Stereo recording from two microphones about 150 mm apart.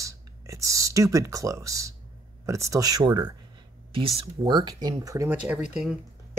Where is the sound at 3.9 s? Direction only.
35° right (ahead or behind); by 5.3 s 20° right (ahead or behind).